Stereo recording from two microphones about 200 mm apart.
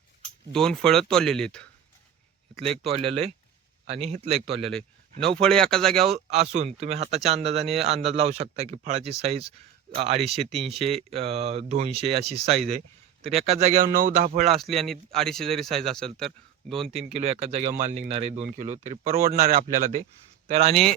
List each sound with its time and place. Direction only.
0.5 s speech: 5° left (ahead or behind)
3.8 s speech: 30° right (ahead or behind)
4.6 s speech: 5° left (ahead or behind)
6.1 s speech: 30° right (ahead or behind)
13.9 s speech: 45° right (ahead or behind)
14.5 s speech: centre (ahead or behind)
16.7 s speech: 30° right (ahead or behind)